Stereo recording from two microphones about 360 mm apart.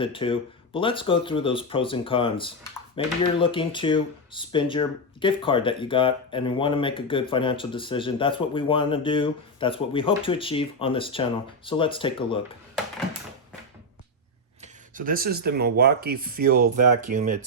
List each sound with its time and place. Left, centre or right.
0.0 s speech: centre
14.6 s speech: right